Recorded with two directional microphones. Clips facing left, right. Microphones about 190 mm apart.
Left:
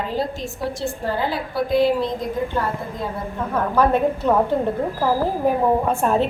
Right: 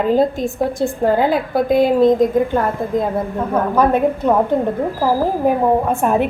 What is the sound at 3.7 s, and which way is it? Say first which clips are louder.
Speech: right 2 dB; 15° right (ahead or behind).